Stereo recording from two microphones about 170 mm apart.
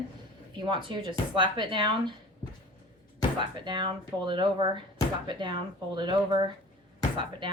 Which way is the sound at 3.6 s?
25° right (ahead or behind).